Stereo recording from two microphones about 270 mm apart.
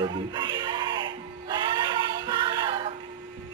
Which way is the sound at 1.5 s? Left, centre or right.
Centre.